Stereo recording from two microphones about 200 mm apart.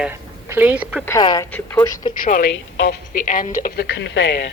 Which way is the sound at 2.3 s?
45° left (ahead or behind).